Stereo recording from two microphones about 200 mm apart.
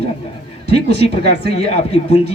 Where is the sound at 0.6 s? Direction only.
55° right (ahead or behind).